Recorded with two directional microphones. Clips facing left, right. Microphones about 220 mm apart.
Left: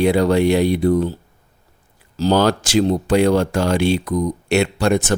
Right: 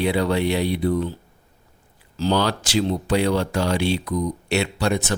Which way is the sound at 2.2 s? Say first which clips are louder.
Left 5 dB; 45° left (ahead or behind).